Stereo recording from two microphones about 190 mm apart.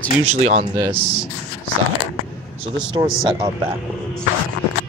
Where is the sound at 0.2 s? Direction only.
35° right (ahead or behind).